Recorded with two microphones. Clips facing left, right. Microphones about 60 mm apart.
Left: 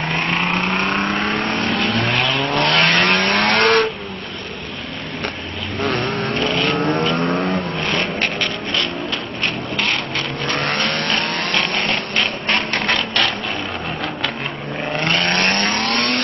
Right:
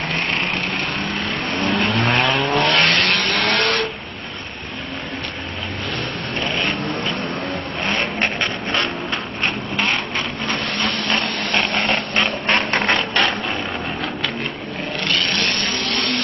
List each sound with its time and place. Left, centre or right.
0.1 s vehicle: centre
1.2 s vehicle: left
1.8 s vehicle: centre
3.0 s vehicle: left
3.3 s vehicle: left
5.8 s vehicle: left
7.9 s a sound: right
9.4 s vehicle: centre
10.6 s vehicle: left
12.2 s a sound: centre
12.8 s music: centre
15.0 s vehicle: left